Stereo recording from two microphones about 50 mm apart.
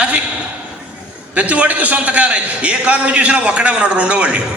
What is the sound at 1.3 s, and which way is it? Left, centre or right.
A man's voice, right.